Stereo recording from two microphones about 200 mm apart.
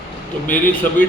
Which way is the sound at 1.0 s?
45° left (ahead or behind).